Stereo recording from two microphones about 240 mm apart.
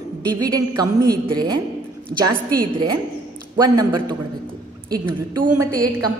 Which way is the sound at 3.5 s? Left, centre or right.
Centre.